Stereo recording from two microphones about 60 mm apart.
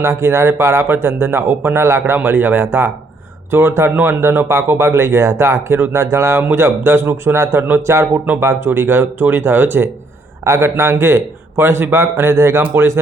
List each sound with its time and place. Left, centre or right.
0.0 s speech: right
2.1 s speech: right
10.4 s speech: right